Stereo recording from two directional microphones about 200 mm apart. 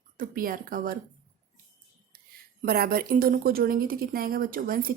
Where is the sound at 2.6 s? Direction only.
50° right (ahead or behind).